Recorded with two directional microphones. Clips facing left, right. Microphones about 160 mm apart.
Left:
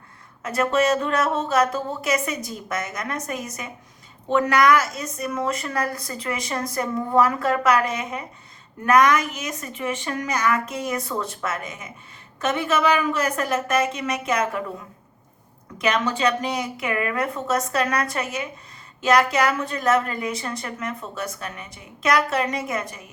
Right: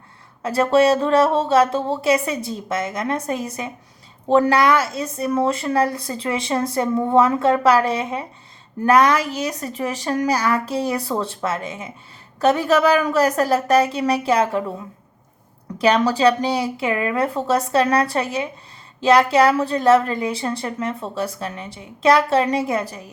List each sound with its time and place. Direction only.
0.4 s a woman's voice: 30° right (ahead or behind)
15.8 s a woman's voice: 35° right (ahead or behind)